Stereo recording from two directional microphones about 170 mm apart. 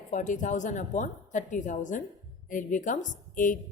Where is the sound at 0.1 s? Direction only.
45° left (ahead or behind).